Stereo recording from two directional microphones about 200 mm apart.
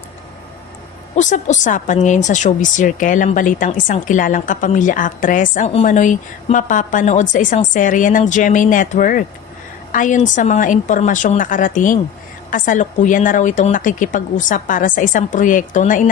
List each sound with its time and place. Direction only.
1.1 s a woman's voice: 35° left (ahead or behind)